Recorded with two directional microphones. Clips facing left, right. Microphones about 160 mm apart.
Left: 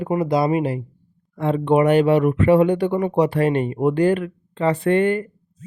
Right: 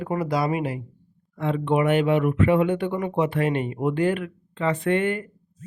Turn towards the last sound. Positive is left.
turn(degrees=35)  # may be behind; listen again after turning